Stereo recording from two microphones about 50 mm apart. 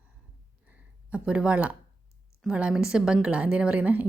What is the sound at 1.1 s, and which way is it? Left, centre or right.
A woman's voice, centre.